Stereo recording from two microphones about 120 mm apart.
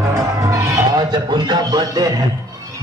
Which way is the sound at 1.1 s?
40° right (ahead or behind).